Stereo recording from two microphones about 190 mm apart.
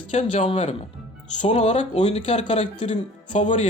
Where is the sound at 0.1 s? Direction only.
35° left (ahead or behind).